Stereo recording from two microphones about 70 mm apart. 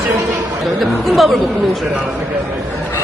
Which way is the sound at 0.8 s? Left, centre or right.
Centre.